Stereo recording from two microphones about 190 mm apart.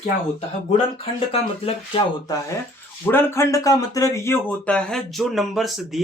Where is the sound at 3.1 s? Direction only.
10° left (ahead or behind).